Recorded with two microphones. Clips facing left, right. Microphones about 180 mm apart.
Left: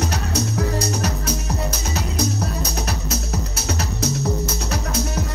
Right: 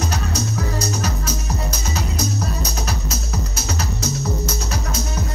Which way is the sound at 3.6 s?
60° left (ahead or behind).